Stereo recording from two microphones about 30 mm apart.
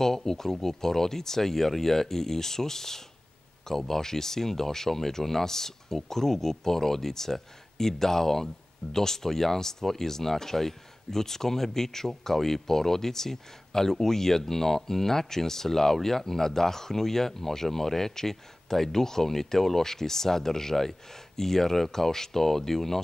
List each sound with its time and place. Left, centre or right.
0.0 s speech: centre